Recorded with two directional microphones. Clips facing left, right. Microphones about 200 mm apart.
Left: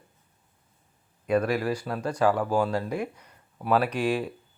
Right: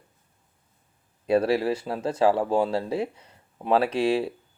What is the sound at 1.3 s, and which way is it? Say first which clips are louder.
Speech: right 3 dB; 30° right (ahead or behind).